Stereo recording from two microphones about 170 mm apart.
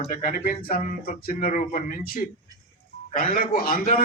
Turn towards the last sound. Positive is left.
turn(degrees=55)  # may be behind; listen again after turning